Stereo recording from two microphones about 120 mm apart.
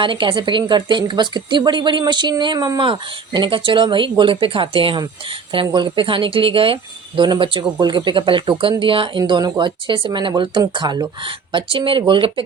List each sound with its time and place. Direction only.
0.0 s speech: 45° right (ahead or behind)